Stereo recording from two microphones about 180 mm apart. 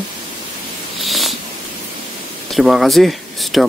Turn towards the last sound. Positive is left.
turn(degrees=0)  # may be behind; listen again after turning